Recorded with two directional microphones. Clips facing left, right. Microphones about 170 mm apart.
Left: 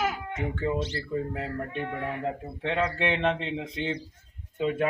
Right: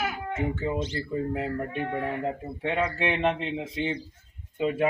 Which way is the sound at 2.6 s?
10° right (ahead or behind).